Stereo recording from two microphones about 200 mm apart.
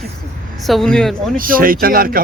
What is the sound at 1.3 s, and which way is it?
Speech, 45° right (ahead or behind).